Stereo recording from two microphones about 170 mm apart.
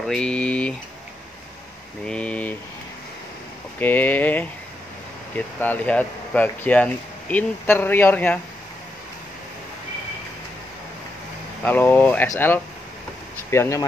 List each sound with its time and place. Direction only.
0.0 s speech: 5° left (ahead or behind)
2.0 s speech: 5° left (ahead or behind)
3.8 s speech: 10° left (ahead or behind)
5.6 s speech: 10° left (ahead or behind)
11.6 s speech: 10° left (ahead or behind)